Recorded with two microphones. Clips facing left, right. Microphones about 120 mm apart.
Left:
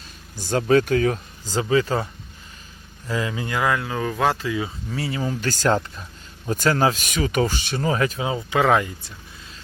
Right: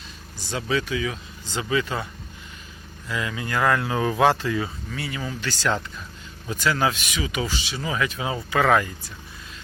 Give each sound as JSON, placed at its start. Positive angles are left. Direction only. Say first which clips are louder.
{"t": 0.3, "sound": "speech", "louder": "left 8 dB", "side_deg": 45}
{"t": 3.1, "sound": "speech", "louder": "left 3 dB", "side_deg": 30}
{"t": 3.6, "sound": "speech", "louder": "right 2 dB", "side_deg": 5}
{"t": 4.9, "sound": "speech", "louder": "left 5 dB", "side_deg": 30}
{"t": 8.2, "sound": "speech", "louder": "left 2 dB", "side_deg": 20}